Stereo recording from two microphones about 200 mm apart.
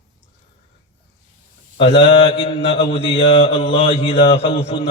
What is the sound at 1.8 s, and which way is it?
Mantra, 30° left (ahead or behind).